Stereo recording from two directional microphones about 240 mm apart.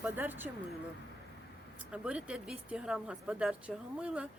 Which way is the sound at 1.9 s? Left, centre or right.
Centre.